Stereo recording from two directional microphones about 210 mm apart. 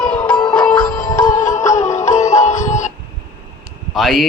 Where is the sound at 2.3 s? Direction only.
35° left (ahead or behind).